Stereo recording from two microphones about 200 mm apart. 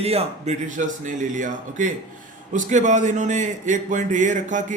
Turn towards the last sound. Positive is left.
turn(degrees=-40)  # may be behind; listen again after turning